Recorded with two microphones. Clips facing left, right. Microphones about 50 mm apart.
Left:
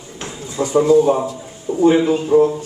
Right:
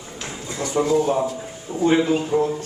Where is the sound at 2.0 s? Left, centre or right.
Centre.